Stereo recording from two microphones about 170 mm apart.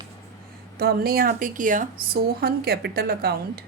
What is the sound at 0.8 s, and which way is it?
Speech, 65° right (ahead or behind).